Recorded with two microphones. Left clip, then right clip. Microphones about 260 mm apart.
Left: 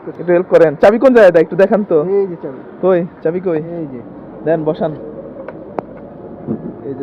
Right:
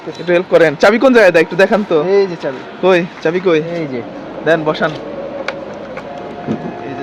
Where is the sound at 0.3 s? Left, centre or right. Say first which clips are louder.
Left 1 dB; centre.